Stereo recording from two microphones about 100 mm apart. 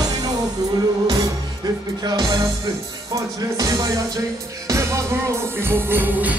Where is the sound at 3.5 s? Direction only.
35° right (ahead or behind); by 6.3 s 20° right (ahead or behind).